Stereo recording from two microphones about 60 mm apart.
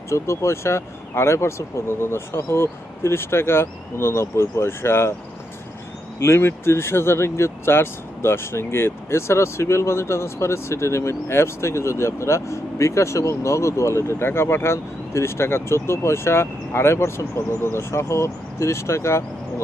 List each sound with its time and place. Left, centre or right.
0.1 s speech: left
6.1 s speech: left